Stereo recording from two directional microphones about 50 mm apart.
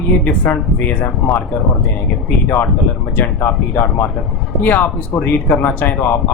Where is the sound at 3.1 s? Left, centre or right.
Left.